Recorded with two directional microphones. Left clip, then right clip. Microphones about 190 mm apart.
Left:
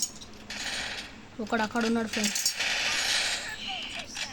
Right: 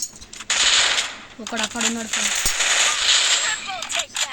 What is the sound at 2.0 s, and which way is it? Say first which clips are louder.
Coin: right 7 dB; 50° right (ahead or behind).